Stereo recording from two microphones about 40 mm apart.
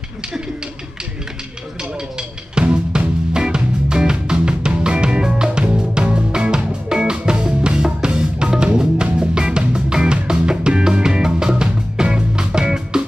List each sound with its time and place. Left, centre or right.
1.8 s music: right